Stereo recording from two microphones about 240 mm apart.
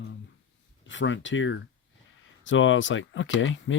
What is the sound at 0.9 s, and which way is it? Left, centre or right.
Speech, left.